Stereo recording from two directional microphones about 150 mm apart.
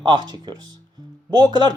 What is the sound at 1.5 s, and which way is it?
Speech, 30° right (ahead or behind).